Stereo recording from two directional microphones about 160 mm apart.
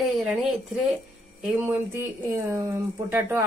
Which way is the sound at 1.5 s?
15° right (ahead or behind).